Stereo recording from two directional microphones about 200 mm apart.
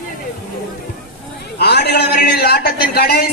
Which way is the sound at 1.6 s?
55° left (ahead or behind).